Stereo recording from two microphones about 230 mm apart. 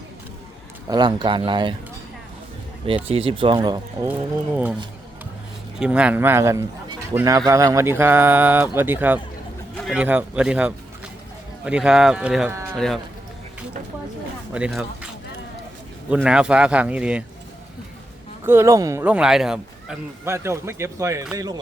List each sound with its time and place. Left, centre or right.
0.9 s speech: centre
2.8 s speech: right
4.5 s speech: centre
5.8 s speech: centre
14.5 s speech: centre
18.4 s speech: centre